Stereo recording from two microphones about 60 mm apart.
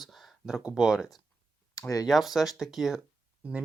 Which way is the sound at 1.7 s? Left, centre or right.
Left.